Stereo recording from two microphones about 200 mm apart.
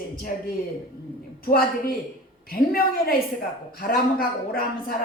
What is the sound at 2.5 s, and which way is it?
A woman's voice, 50° left (ahead or behind).